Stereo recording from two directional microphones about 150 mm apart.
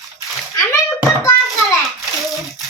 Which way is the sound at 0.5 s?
20° left (ahead or behind).